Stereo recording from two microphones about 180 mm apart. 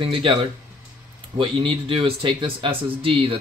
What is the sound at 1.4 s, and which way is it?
Speech, 30° right (ahead or behind).